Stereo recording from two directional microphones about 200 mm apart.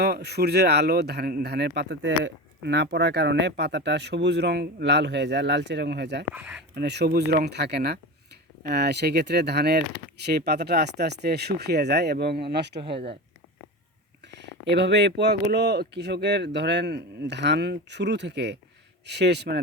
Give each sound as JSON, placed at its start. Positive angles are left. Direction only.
{"t": 0.0, "sound": "speech", "side_deg": -55}
{"t": 12.8, "sound": "speech", "side_deg": -25}
{"t": 14.3, "sound": "a sound", "side_deg": -60}
{"t": 15.2, "sound": "speech", "side_deg": -55}